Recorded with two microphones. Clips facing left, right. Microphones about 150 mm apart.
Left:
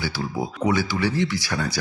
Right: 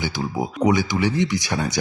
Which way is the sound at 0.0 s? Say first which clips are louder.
Right 2 dB; 20° right (ahead or behind).